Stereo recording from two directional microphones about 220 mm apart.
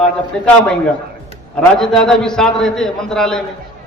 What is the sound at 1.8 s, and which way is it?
A man's voice, centre (ahead or behind).